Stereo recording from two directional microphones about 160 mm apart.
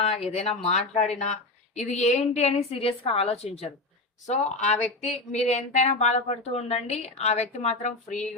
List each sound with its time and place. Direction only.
0.0 s a woman's voice: 40° left (ahead or behind)